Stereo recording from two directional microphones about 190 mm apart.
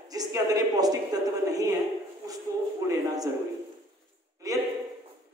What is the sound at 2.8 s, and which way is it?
Speech, 15° right (ahead or behind).